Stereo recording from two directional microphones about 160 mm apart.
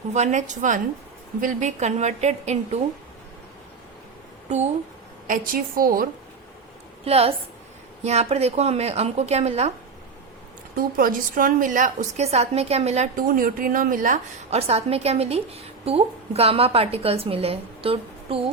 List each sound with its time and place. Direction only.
0.1 s a woman's voice: 45° right (ahead or behind)
4.4 s speech: 45° right (ahead or behind)
5.3 s a woman's voice: 60° right (ahead or behind)
7.0 s a woman's voice: 40° right (ahead or behind)
10.8 s a woman's voice: 65° right (ahead or behind)
14.7 s a woman's voice: 40° right (ahead or behind)